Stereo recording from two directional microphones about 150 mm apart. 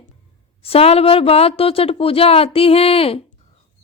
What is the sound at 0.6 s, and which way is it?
A woman's voice, 40° left (ahead or behind).